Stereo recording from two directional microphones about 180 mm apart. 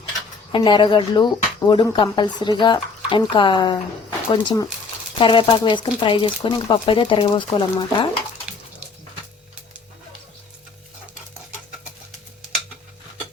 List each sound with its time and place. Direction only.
0.5 s speech: 30° left (ahead or behind)